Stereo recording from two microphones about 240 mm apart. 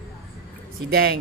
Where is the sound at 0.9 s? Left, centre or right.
Right.